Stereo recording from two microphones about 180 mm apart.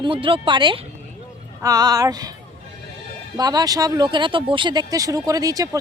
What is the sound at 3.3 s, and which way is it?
Speech, 20° right (ahead or behind).